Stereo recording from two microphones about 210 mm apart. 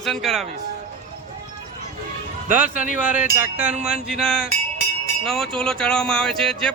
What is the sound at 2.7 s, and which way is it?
Speech, 40° left (ahead or behind).